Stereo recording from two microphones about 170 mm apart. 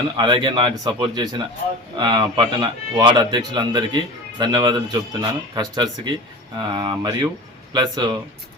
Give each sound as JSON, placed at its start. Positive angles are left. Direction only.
{"t": 0.2, "sound": "speech", "side_deg": -25}